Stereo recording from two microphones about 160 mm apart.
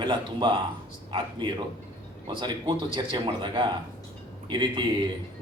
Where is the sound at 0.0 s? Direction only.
30° right (ahead or behind).